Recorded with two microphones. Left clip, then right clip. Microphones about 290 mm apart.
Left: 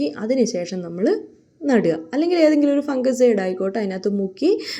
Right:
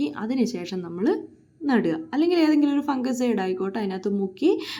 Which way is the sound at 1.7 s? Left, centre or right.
Centre.